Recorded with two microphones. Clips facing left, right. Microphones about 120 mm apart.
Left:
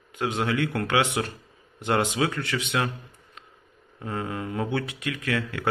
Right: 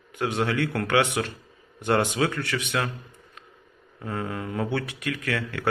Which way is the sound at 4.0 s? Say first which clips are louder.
Even; 25° left (ahead or behind).